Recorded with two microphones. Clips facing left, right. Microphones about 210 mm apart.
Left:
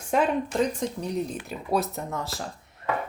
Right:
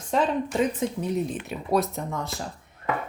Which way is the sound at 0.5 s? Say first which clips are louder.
Right 1 dB; 5° right (ahead or behind).